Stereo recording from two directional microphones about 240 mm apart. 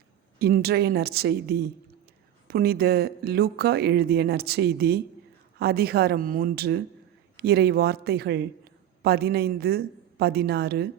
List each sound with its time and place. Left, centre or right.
0.3 s speech: right